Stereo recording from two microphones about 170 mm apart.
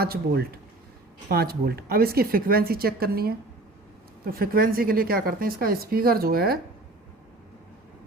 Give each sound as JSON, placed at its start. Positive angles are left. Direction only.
{"t": 0.0, "sound": "a woman's voice", "side_deg": -65}